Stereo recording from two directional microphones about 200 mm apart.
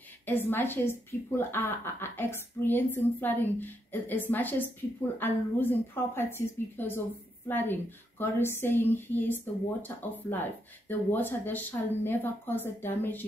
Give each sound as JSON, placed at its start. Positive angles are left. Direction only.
{"t": 0.2, "sound": "a woman's voice", "side_deg": 10}